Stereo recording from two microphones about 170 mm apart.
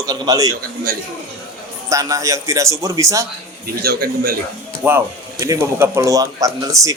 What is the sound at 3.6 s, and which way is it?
Speech, 65° right (ahead or behind).